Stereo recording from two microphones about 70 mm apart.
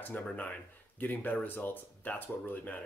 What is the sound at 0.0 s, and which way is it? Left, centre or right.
Speech, left.